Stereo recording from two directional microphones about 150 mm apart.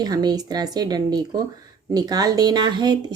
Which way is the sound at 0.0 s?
25° right (ahead or behind).